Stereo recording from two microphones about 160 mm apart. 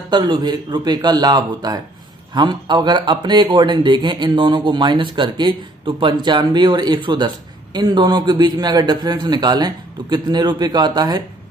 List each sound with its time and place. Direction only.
0.1 s speech: 30° right (ahead or behind)